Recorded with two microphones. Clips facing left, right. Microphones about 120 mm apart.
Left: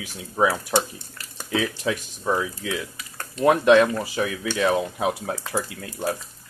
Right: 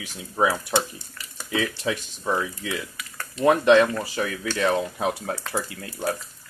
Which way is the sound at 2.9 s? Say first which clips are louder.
Even; 40° left (ahead or behind).